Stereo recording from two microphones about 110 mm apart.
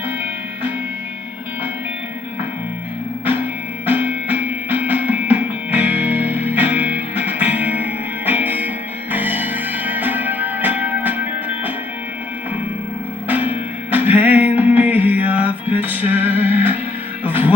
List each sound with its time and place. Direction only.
3.2 s music: 15° right (ahead or behind)
13.2 s music: 15° right (ahead or behind)